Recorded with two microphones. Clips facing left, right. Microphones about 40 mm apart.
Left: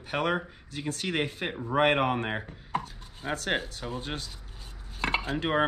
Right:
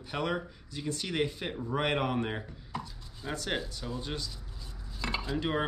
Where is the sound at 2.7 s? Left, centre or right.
Left.